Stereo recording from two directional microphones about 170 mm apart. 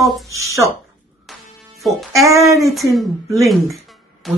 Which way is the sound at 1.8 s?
Centre (ahead or behind).